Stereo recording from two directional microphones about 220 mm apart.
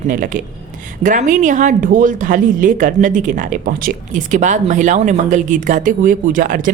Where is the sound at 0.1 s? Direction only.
35° right (ahead or behind).